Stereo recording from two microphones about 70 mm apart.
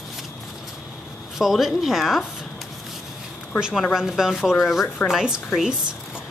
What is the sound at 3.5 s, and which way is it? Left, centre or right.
Speech, centre.